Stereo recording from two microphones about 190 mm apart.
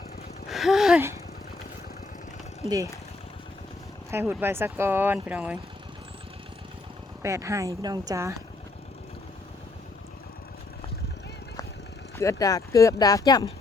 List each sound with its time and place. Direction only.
0.4 s a sound: centre (ahead or behind)
2.6 s speech: 20° right (ahead or behind)
4.1 s speech: 10° right (ahead or behind)
7.2 s speech: 15° right (ahead or behind)
12.1 s speech: 15° left (ahead or behind)